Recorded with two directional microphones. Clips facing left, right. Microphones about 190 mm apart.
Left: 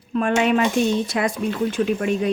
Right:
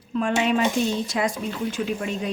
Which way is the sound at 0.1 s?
60° left (ahead or behind).